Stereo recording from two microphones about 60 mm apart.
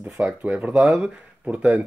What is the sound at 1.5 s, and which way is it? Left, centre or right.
Speech, right.